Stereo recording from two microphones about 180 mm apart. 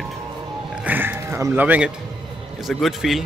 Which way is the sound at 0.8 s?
10° right (ahead or behind).